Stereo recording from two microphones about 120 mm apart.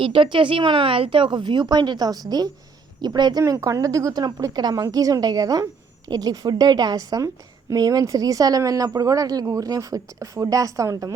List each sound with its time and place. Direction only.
0.0 s a woman's voice: 45° right (ahead or behind); by 11.1 s 30° right (ahead or behind)